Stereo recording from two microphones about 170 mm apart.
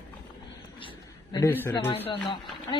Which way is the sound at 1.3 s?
15° left (ahead or behind).